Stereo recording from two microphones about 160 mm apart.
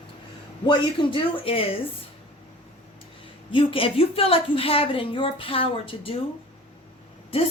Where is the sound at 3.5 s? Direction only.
35° left (ahead or behind).